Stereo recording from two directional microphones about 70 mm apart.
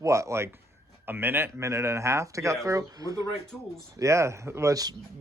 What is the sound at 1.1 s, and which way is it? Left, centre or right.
Speech, right.